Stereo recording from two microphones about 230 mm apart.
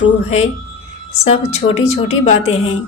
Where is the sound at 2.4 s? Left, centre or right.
Left.